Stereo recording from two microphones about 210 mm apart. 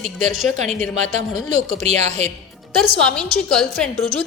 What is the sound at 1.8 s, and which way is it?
Speech, 35° right (ahead or behind).